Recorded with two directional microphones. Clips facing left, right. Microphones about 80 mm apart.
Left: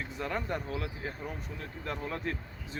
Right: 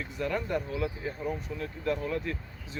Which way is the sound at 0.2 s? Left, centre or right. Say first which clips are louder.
Right 4 dB; left.